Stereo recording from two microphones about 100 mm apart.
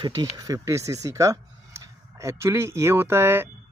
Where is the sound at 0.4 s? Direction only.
35° right (ahead or behind).